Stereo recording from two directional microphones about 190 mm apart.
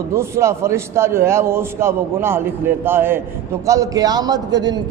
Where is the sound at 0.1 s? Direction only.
15° right (ahead or behind).